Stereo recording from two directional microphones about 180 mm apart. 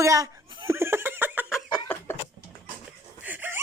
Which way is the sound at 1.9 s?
10° left (ahead or behind).